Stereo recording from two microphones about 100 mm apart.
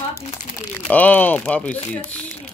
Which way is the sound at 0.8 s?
15° left (ahead or behind).